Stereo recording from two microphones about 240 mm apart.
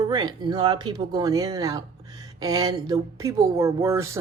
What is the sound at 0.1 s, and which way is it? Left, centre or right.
Speech, centre.